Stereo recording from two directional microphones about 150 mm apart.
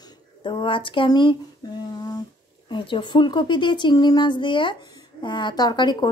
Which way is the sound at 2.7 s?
30° left (ahead or behind).